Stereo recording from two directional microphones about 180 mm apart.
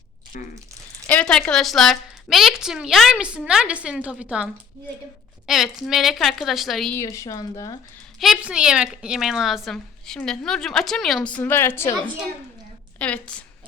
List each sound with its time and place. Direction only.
0.3 s speech: 50° left (ahead or behind)
1.0 s a woman's voice: 5° left (ahead or behind)
5.5 s a woman's voice: centre (ahead or behind)
6.9 s speech: 15° left (ahead or behind)
8.2 s a woman's voice: 5° right (ahead or behind); by 11.9 s 15° left (ahead or behind)
13.0 s speech: 5° left (ahead or behind)